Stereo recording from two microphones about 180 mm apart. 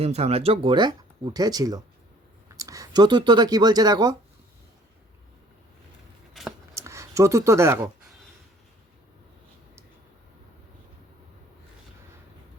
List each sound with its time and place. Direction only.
0.0 s speech: 35° right (ahead or behind)
6.4 s scissors: centre (ahead or behind)
6.7 s speech: 15° right (ahead or behind)